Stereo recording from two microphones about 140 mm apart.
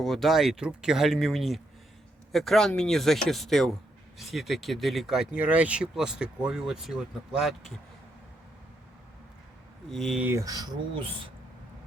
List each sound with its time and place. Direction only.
0.0 s speech: centre (ahead or behind)
9.9 s speech: centre (ahead or behind)
10.2 s speech: 20° right (ahead or behind); by 11.3 s 35° right (ahead or behind)